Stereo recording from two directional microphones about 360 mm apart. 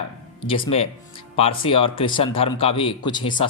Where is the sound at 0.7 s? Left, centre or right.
Centre.